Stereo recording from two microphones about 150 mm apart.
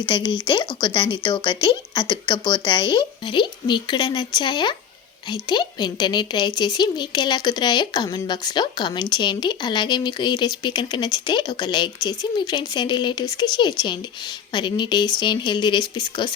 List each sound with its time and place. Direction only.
0.1 s a woman's voice: 30° left (ahead or behind)